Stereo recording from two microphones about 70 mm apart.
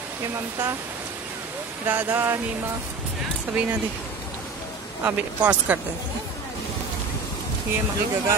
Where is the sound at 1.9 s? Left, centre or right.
Right.